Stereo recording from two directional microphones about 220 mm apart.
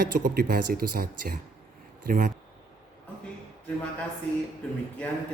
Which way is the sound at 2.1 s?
40° right (ahead or behind).